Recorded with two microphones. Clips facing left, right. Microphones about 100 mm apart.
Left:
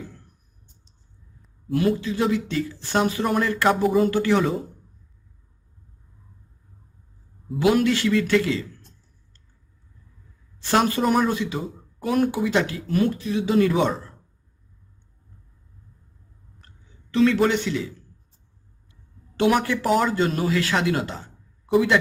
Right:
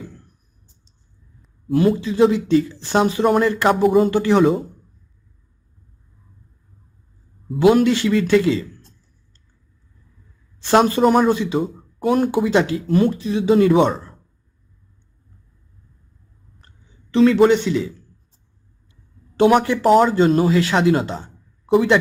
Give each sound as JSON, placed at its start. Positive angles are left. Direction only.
{"t": 2.0, "sound": "speech", "side_deg": -25}
{"t": 7.6, "sound": "speech", "side_deg": -25}
{"t": 10.7, "sound": "speech", "side_deg": -25}
{"t": 17.1, "sound": "speech", "side_deg": -25}
{"t": 19.4, "sound": "speech", "side_deg": -25}